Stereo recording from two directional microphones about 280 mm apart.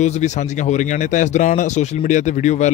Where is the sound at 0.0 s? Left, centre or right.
Left.